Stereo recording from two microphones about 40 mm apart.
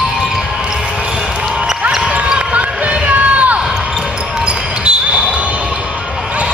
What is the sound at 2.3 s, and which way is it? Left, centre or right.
Basketball bounce, right.